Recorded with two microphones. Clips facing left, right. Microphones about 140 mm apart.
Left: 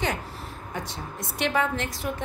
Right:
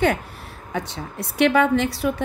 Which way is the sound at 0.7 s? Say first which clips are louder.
Right 7 dB; 70° right (ahead or behind).